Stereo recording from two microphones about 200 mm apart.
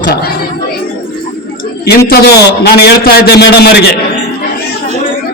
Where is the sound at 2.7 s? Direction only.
55° left (ahead or behind).